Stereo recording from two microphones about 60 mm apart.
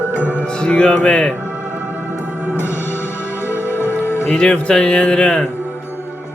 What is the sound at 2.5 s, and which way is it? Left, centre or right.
Music, left.